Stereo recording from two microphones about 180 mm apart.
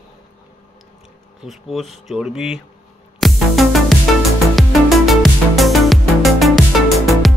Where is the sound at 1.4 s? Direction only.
Centre (ahead or behind).